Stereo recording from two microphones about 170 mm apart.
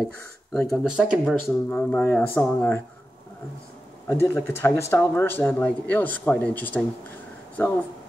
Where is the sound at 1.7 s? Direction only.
10° left (ahead or behind).